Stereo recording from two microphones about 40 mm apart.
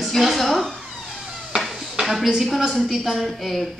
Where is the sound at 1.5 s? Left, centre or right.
Centre.